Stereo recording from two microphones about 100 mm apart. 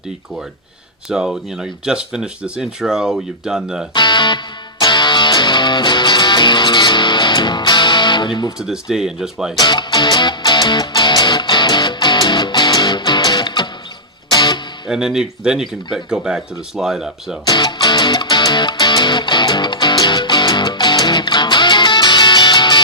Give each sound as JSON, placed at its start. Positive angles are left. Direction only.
{"t": 1.0, "sound": "speech", "side_deg": -5}
{"t": 3.9, "sound": "speech", "side_deg": 50}
{"t": 4.8, "sound": "music", "side_deg": 50}
{"t": 8.5, "sound": "speech", "side_deg": -5}
{"t": 9.6, "sound": "music", "side_deg": 50}
{"t": 14.8, "sound": "speech", "side_deg": -5}
{"t": 17.4, "sound": "music", "side_deg": 45}